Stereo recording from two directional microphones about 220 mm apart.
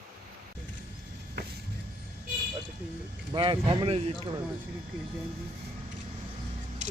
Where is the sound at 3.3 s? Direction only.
25° right (ahead or behind).